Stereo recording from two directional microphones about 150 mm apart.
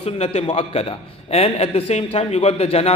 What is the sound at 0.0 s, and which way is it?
A man's voice, 45° left (ahead or behind).